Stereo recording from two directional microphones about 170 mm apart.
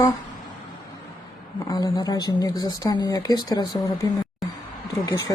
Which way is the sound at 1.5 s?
25° left (ahead or behind).